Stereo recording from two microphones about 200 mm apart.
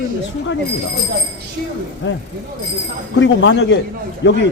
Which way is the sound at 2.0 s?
65° left (ahead or behind).